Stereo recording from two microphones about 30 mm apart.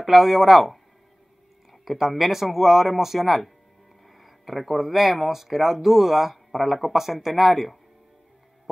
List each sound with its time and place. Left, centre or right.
0.0 s speech: centre